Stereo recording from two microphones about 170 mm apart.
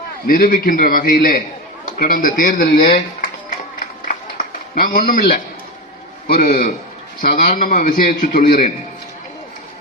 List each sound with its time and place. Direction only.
0.3 s a man's voice: 55° left (ahead or behind)
3.8 s a sound: 50° left (ahead or behind)
6.5 s a man's voice: 55° left (ahead or behind)